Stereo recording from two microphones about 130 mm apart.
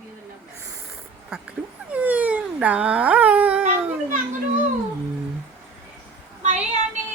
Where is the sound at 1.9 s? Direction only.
10° right (ahead or behind).